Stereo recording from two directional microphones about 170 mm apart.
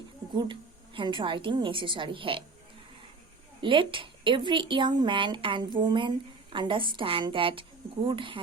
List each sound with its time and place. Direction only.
0.9 s speech: 30° right (ahead or behind)
3.6 s speech: 30° right (ahead or behind)